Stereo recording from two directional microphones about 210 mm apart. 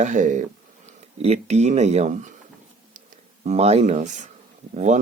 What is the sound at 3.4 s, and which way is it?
Speech, 30° right (ahead or behind).